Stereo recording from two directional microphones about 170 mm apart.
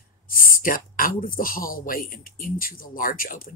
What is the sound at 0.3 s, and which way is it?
Speech, 55° left (ahead or behind).